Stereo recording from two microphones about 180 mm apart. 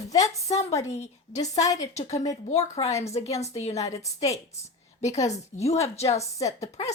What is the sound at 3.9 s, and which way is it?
Speech, 15° left (ahead or behind).